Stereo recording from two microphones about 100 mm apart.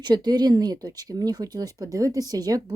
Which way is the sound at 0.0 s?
45° right (ahead or behind).